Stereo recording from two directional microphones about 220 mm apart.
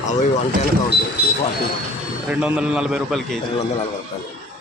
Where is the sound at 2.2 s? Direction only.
5° right (ahead or behind).